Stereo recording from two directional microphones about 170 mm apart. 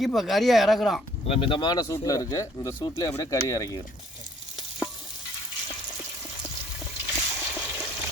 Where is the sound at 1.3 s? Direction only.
30° left (ahead or behind).